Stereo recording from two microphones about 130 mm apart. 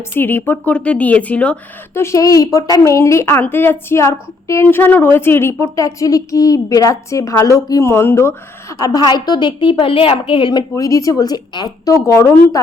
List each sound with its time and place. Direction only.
0.1 s a woman's voice: 15° left (ahead or behind)
8.8 s a woman's voice: 30° left (ahead or behind)
10.8 s a woman's voice: 25° left (ahead or behind)